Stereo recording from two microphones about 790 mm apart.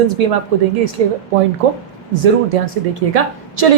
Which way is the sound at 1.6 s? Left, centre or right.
Right.